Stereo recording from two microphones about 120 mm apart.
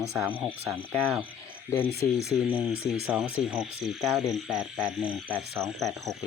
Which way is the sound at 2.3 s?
5° right (ahead or behind).